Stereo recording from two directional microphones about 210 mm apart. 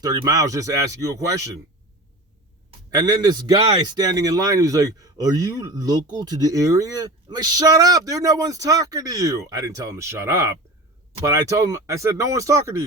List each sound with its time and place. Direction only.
0.0 s a man's voice: 20° right (ahead or behind)
2.6 s a man's voice: 20° right (ahead or behind)